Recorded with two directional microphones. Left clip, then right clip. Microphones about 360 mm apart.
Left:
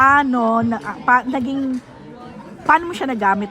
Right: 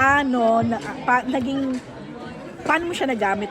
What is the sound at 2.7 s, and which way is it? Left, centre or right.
Speech, left.